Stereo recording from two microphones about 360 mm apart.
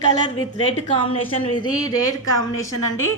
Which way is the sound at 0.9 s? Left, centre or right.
Centre.